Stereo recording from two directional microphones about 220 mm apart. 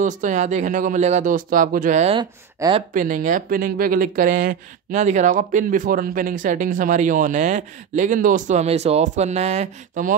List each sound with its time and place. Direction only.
0.0 s speech: 35° right (ahead or behind)
2.1 s speech: 20° right (ahead or behind)
2.9 s speech: 35° right (ahead or behind)